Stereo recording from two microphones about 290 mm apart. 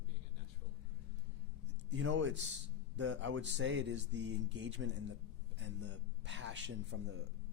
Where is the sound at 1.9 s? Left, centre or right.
Right.